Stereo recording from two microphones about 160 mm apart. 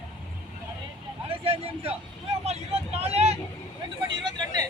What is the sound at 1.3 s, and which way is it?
Speech, 35° right (ahead or behind).